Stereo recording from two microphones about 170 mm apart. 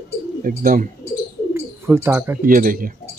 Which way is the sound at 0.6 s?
55° right (ahead or behind).